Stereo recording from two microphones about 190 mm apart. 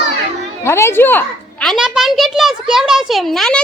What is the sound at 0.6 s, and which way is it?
Speech, 15° left (ahead or behind).